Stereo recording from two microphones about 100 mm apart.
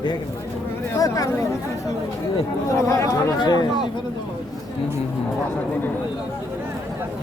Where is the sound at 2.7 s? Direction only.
30° left (ahead or behind).